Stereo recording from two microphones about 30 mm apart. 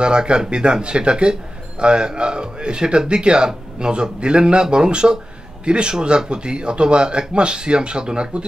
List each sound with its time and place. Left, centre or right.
0.0 s speech: right